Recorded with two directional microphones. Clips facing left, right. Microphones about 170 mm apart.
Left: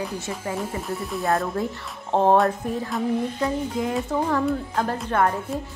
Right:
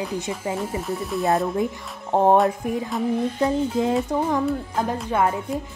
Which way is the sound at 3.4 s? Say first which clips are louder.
Right 4 dB; 25° right (ahead or behind).